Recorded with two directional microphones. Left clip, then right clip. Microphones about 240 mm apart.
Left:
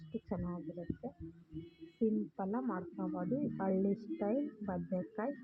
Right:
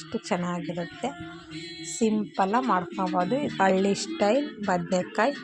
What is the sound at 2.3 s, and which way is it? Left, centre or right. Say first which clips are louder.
Speech: right 16 dB; right.